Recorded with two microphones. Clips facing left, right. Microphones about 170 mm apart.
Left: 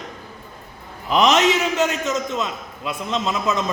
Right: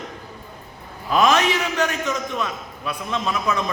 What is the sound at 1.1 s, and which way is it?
A man's voice, 20° left (ahead or behind).